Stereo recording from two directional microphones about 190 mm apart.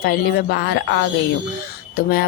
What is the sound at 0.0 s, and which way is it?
Speech, 55° left (ahead or behind).